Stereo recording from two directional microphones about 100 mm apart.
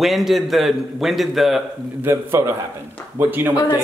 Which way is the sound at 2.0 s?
25° right (ahead or behind).